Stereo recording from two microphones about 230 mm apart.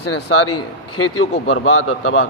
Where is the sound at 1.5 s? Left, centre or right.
Left.